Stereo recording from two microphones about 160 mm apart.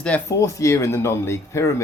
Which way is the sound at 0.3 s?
20° left (ahead or behind).